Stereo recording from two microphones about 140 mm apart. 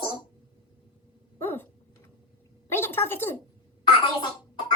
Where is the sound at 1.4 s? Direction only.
15° left (ahead or behind).